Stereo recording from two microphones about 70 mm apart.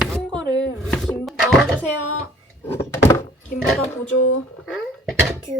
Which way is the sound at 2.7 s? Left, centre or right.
Left.